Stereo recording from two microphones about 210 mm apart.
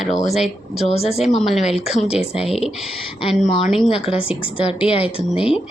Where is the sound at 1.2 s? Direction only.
Centre (ahead or behind).